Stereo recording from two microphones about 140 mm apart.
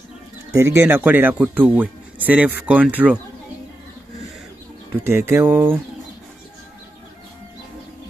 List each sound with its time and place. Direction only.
0.5 s speech: 20° right (ahead or behind)
5.0 s speech: 15° right (ahead or behind)